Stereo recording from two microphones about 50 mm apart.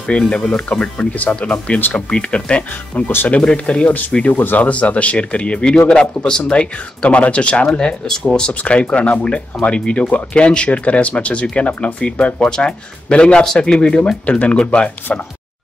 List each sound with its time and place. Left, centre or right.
0.3 s speech: left
14.2 s speech: left